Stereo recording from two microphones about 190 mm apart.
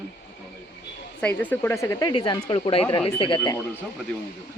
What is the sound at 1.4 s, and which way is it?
Speech, 10° left (ahead or behind).